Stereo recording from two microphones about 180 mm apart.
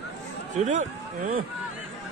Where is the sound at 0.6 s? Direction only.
40° right (ahead or behind).